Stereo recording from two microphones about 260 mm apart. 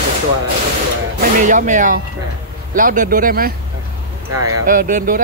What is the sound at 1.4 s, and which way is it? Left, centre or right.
Speech, right.